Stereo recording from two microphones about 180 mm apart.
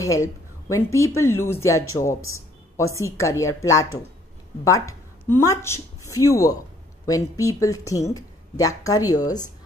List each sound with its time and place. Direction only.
0.0 s a woman's voice: 15° left (ahead or behind)